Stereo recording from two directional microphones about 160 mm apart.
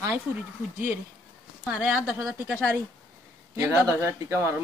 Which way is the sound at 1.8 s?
5° right (ahead or behind).